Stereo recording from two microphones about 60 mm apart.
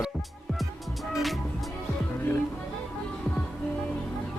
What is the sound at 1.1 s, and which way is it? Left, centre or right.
Music, centre.